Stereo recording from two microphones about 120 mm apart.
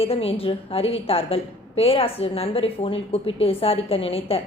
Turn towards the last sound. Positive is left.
turn(degrees=55)  # may be behind; listen again after turning